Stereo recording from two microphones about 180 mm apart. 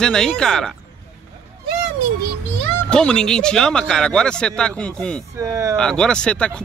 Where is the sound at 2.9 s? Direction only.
5° left (ahead or behind).